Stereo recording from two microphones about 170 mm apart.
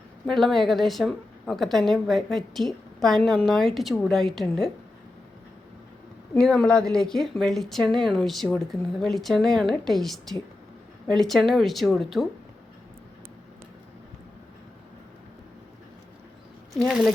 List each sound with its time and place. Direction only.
0.3 s a woman's voice: centre (ahead or behind)
6.3 s a woman's voice: 5° left (ahead or behind)
16.7 s a woman's voice: centre (ahead or behind)